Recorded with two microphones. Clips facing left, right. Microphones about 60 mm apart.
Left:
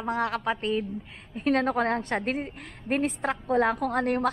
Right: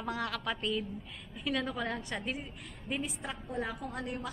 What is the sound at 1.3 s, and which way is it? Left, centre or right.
A woman's voice, left.